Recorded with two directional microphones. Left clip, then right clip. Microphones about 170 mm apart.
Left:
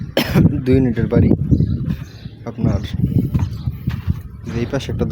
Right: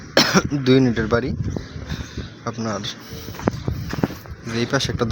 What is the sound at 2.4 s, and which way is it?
Speech, 35° left (ahead or behind).